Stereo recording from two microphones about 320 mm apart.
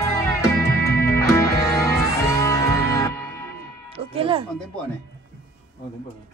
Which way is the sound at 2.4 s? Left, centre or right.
Centre.